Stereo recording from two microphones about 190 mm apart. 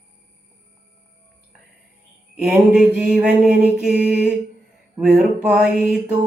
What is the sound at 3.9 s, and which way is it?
Mantra, 60° right (ahead or behind).